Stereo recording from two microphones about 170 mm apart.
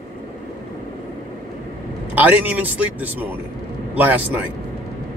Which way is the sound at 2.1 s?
10° right (ahead or behind).